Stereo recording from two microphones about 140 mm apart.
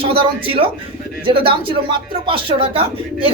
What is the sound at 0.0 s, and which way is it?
Speech, 40° right (ahead or behind).